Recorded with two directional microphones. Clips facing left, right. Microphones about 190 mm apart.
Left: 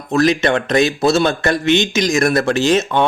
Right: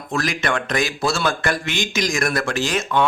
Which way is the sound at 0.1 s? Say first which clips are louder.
Left 9 dB; 25° left (ahead or behind).